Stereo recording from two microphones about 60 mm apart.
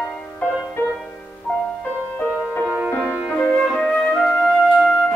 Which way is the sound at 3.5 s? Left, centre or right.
Centre.